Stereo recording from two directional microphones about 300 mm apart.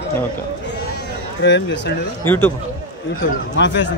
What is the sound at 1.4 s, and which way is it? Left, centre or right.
Speech, left.